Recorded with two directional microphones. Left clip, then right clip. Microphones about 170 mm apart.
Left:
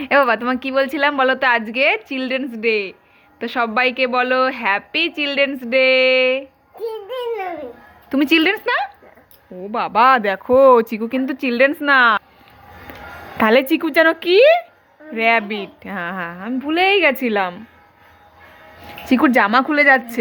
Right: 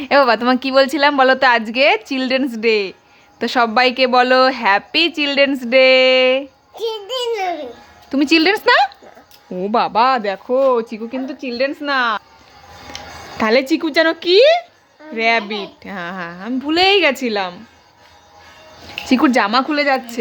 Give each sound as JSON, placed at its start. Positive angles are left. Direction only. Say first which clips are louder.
{"t": 0.0, "sound": "a woman's voice", "louder": "right 2 dB", "side_deg": -25}
{"t": 7.1, "sound": "a child's voice", "louder": "right 4 dB", "side_deg": -50}
{"t": 8.1, "sound": "a woman's voice", "louder": "right 2 dB", "side_deg": -20}
{"t": 9.9, "sound": "a woman's voice", "louder": "left 7 dB", "side_deg": -15}
{"t": 10.4, "sound": "a woman's voice", "louder": "left 5 dB", "side_deg": 0}
{"t": 13.3, "sound": "a woman's voice", "louder": "left 1 dB", "side_deg": -15}
{"t": 18.9, "sound": "a woman's voice", "louder": "right 1 dB", "side_deg": -20}